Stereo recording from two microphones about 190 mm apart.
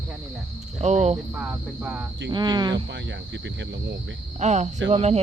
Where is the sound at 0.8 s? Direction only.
35° right (ahead or behind).